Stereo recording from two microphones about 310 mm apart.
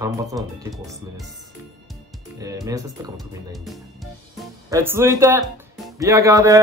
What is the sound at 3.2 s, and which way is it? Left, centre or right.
Speech, centre.